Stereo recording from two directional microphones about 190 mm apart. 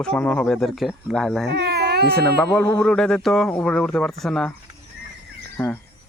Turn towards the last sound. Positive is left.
turn(degrees=10)  # may be behind; listen again after turning